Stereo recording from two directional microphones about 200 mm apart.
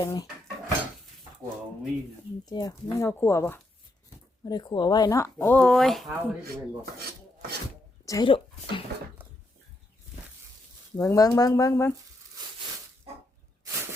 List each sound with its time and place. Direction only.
0.0 s speech: 20° left (ahead or behind)
2.5 s speech: 20° left (ahead or behind); by 6.3 s 5° right (ahead or behind)
8.0 s a sound: 20° left (ahead or behind)
10.9 s speech: 15° left (ahead or behind)